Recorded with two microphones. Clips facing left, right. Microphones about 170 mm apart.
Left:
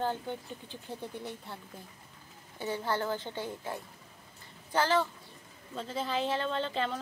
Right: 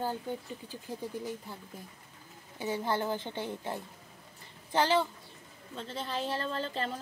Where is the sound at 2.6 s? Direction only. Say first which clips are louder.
Right 1 dB; 15° right (ahead or behind).